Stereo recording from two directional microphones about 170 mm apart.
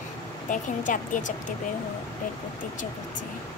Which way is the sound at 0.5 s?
50° left (ahead or behind).